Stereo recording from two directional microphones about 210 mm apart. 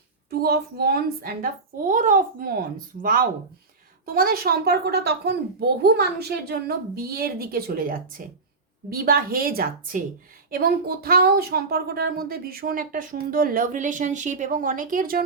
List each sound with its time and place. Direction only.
0.3 s a woman's voice: 45° right (ahead or behind)